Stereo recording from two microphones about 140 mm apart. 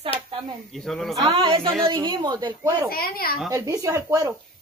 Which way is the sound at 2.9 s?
90° left.